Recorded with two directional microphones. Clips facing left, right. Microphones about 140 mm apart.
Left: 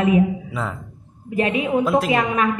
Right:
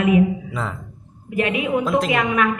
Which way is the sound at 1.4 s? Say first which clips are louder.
Left 1 dB; 30° left (ahead or behind).